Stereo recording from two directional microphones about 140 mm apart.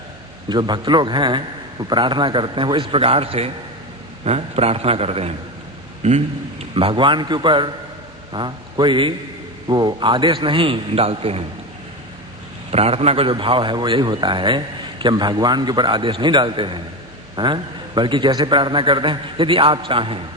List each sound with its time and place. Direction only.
0.4 s a man's voice: 30° right (ahead or behind)
12.7 s a man's voice: 45° right (ahead or behind)